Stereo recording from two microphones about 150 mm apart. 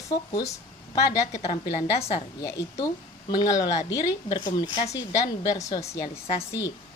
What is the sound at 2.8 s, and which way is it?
A woman's voice, 25° left (ahead or behind).